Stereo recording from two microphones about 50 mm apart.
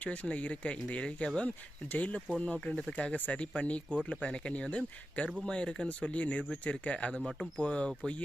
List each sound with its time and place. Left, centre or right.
0.0 s speech: left
1.4 s speech: left